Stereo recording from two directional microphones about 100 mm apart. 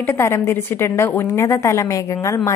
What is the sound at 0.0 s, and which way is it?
A woman's voice, 25° left (ahead or behind).